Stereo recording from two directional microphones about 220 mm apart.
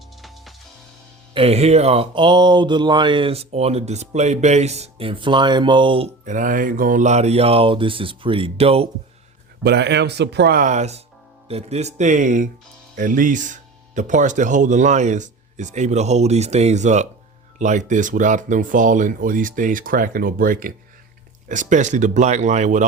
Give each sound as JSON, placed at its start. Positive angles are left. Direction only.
{"t": 0.2, "sound": "music", "side_deg": 0}
{"t": 1.3, "sound": "mantra", "side_deg": -25}
{"t": 9.6, "sound": "speech", "side_deg": -50}